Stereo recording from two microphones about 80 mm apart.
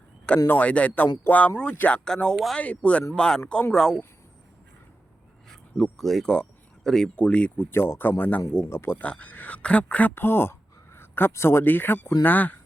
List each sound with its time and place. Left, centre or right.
0.4 s a man's voice: left
5.5 s speech: centre
7.7 s a man's voice: left
9.0 s a man's voice: centre